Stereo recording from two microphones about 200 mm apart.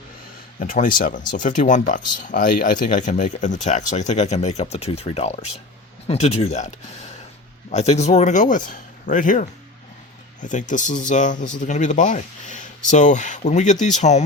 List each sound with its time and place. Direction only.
0.6 s speech: 45° left (ahead or behind)